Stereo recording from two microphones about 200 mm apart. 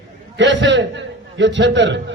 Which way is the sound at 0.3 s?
65° right (ahead or behind).